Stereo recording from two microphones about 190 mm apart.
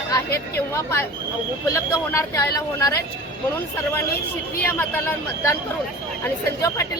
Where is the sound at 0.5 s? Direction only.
15° left (ahead or behind).